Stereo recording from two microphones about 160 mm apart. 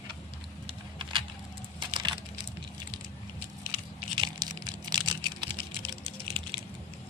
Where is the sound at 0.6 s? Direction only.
30° right (ahead or behind).